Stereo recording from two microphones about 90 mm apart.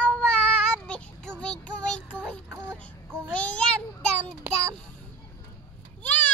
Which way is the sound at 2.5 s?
25° right (ahead or behind).